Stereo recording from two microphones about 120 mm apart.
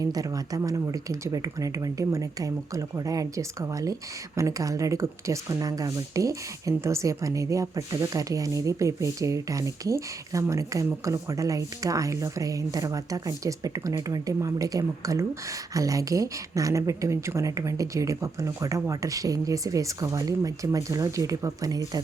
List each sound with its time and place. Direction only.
0.0 s a woman's voice: 30° right (ahead or behind)